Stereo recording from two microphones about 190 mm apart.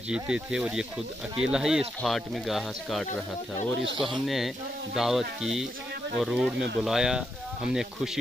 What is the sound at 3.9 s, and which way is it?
Speech, 25° right (ahead or behind).